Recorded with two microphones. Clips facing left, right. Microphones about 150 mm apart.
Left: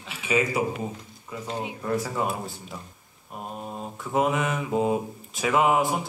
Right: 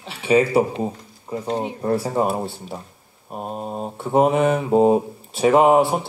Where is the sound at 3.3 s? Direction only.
40° right (ahead or behind).